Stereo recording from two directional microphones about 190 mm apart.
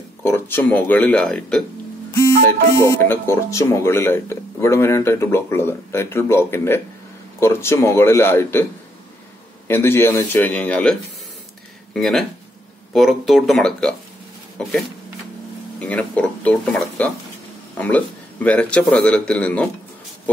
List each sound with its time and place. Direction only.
0.2 s speech: 10° left (ahead or behind)
2.1 s speech: 15° left (ahead or behind)
9.7 s speech: 10° left (ahead or behind)
15.8 s speech: 5° left (ahead or behind)